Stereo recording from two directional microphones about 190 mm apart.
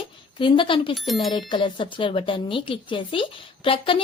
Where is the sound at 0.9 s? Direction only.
Centre (ahead or behind).